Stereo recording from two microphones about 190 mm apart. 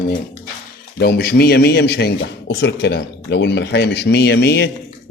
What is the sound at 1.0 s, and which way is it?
A man's voice, 55° left (ahead or behind).